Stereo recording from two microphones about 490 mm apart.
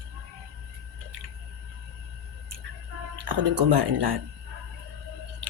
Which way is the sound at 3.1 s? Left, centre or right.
Right.